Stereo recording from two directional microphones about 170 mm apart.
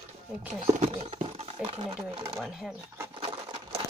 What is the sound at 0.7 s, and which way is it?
Speech, 40° right (ahead or behind).